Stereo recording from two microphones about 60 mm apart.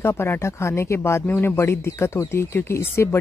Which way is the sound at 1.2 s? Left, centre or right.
Left.